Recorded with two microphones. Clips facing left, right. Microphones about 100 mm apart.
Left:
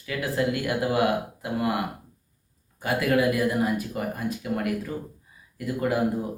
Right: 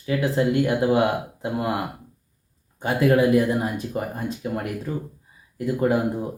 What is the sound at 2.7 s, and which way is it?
Speech, 30° right (ahead or behind).